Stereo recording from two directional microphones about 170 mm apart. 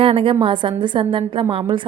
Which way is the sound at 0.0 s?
30° right (ahead or behind).